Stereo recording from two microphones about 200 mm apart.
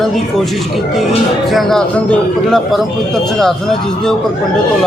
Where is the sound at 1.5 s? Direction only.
Centre (ahead or behind).